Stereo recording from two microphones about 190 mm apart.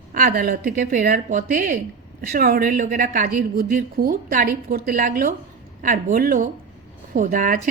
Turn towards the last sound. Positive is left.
turn(degrees=-45)  # may be behind; listen again after turning